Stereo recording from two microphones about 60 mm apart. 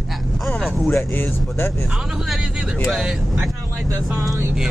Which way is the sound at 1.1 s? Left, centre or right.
Left.